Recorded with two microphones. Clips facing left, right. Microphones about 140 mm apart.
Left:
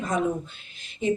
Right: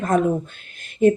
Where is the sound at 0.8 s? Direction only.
50° right (ahead or behind).